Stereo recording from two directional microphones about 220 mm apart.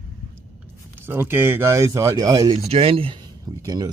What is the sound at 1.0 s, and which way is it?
Speech, 10° right (ahead or behind).